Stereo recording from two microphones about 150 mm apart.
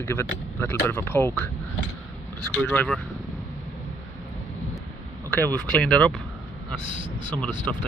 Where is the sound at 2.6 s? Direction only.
10° left (ahead or behind).